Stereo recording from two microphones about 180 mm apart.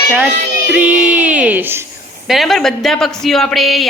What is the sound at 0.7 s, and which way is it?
Speech, 10° right (ahead or behind).